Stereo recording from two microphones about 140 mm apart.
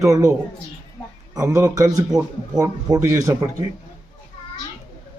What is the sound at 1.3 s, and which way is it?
A man's voice, 20° right (ahead or behind).